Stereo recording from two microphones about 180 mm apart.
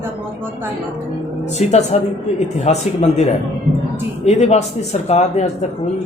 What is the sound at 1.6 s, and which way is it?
A man's voice, 40° left (ahead or behind).